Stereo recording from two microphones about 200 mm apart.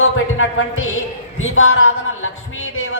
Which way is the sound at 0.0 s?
85° left.